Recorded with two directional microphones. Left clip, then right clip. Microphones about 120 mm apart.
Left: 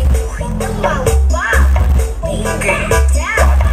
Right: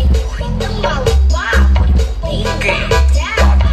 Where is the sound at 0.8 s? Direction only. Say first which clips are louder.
Left 1 dB; 15° right (ahead or behind).